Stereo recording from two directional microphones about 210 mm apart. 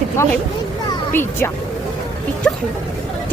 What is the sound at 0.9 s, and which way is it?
Music, 10° left (ahead or behind).